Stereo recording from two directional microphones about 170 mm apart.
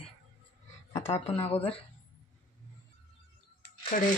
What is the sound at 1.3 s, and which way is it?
Speech, 30° left (ahead or behind).